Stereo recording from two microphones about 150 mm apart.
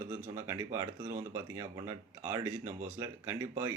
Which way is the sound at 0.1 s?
15° right (ahead or behind).